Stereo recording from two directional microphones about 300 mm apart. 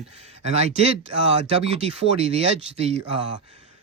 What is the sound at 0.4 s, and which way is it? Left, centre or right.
Speech, right.